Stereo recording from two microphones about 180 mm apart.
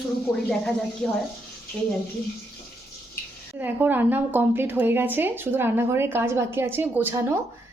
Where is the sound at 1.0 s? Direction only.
5° left (ahead or behind).